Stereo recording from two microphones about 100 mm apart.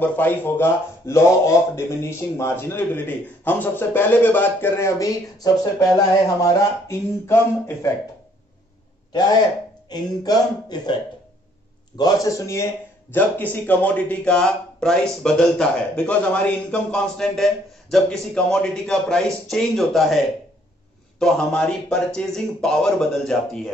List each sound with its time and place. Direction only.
0.0 s speech: 20° left (ahead or behind)
9.8 s speech: 45° left (ahead or behind)
12.0 s a man's voice: 35° left (ahead or behind)
13.1 s speech: 15° left (ahead or behind); by 20.2 s centre (ahead or behind)
21.2 s speech: 5° left (ahead or behind)